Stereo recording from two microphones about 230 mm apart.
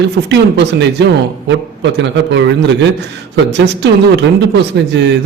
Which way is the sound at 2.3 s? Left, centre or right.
Right.